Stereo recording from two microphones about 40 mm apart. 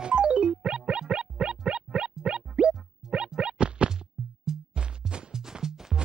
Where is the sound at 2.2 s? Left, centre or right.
Right.